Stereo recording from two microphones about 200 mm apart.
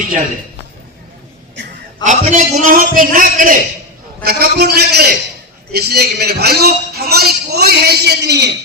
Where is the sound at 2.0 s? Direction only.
40° right (ahead or behind); by 8.5 s 55° right (ahead or behind).